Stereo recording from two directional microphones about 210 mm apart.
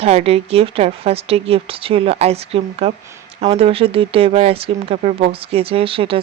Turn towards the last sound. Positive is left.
turn(degrees=-25)  # may be behind; listen again after turning